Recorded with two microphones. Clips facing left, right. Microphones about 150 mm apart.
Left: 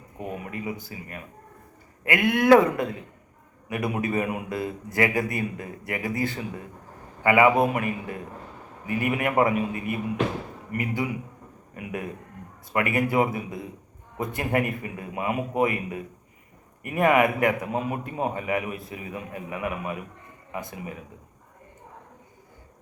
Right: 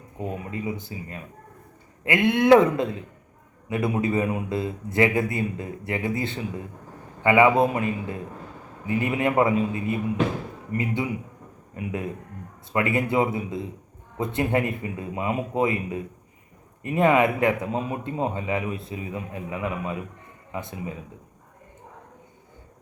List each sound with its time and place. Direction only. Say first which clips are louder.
0.2 s a man's voice: right 2 dB; 25° right (ahead or behind)